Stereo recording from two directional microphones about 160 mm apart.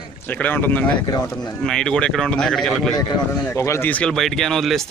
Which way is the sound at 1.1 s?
25° left (ahead or behind).